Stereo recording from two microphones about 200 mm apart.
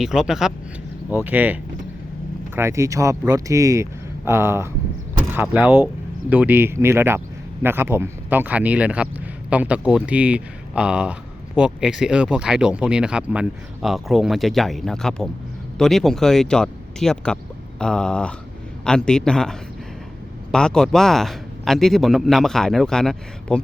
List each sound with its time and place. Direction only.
0.0 s speech: centre (ahead or behind)
2.6 s speech: 15° right (ahead or behind); by 23.6 s 5° left (ahead or behind)